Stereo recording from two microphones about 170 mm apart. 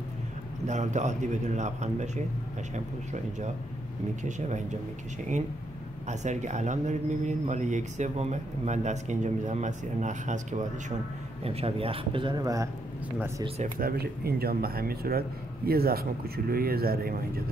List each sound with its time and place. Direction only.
0.7 s speech: 45° right (ahead or behind)
6.0 s a man's voice: 45° right (ahead or behind); by 12.6 s 20° right (ahead or behind)
13.7 s speech: 60° right (ahead or behind)